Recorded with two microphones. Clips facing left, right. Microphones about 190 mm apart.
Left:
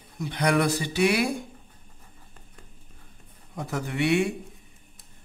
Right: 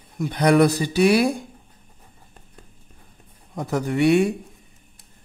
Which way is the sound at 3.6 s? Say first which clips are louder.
Right 7 dB; 40° right (ahead or behind).